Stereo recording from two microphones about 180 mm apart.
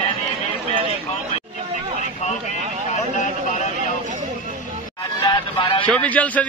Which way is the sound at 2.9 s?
45° left (ahead or behind).